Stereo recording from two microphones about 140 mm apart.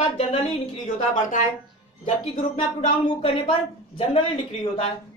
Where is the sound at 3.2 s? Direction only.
40° left (ahead or behind).